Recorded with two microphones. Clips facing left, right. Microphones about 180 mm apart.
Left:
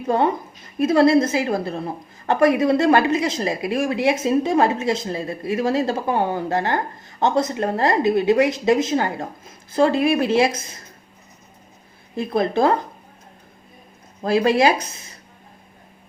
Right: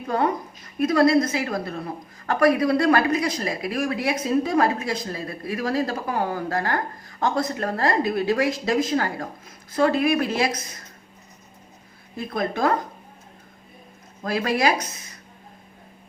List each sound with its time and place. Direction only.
0.1 s a woman's voice: 25° left (ahead or behind)
12.1 s a woman's voice: 25° left (ahead or behind)
14.2 s a woman's voice: 25° left (ahead or behind)